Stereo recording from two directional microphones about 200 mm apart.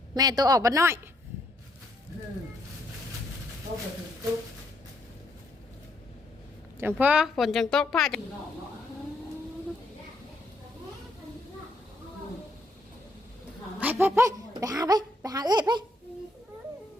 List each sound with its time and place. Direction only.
0.1 s a woman's voice: 20° right (ahead or behind)
6.7 s speech: 10° right (ahead or behind)
13.7 s a child's voice: 10° right (ahead or behind)